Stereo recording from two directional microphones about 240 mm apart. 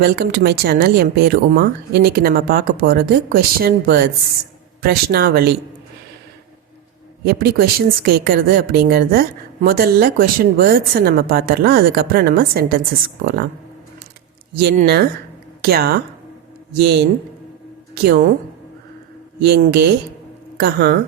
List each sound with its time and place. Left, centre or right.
0.0 s speech: right
7.3 s speech: right
14.6 s speech: right
19.5 s speech: right